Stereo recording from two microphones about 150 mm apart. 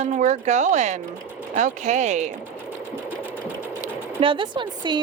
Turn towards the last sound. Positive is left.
turn(degrees=-30)  # may be behind; listen again after turning